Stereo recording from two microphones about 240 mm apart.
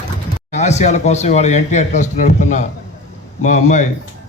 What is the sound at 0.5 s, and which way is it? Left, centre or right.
Speech, left.